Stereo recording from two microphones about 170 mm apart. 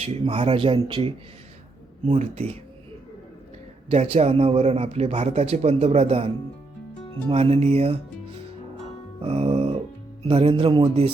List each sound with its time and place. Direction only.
0.0 s speech: 35° right (ahead or behind)
3.8 s speech: 35° right (ahead or behind)
9.2 s music: 35° right (ahead or behind)
10.2 s speech: 35° right (ahead or behind)